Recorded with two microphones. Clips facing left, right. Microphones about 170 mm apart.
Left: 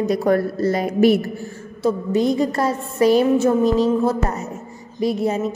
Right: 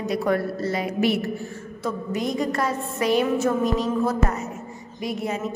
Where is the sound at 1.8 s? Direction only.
30° left (ahead or behind).